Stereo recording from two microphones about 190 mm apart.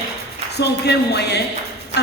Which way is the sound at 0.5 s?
60° left (ahead or behind).